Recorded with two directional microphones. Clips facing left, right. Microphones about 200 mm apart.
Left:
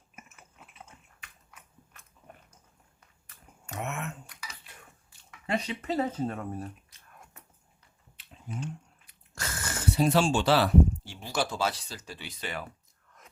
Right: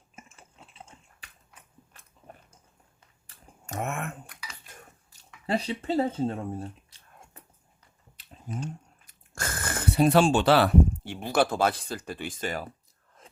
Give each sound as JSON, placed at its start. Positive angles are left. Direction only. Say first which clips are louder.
{"t": 0.2, "sound": "biting", "louder": "right 2 dB", "side_deg": -30}
{"t": 3.7, "sound": "a sound", "louder": "right 3 dB", "side_deg": -50}
{"t": 8.1, "sound": "chewing", "louder": "right 3 dB", "side_deg": -40}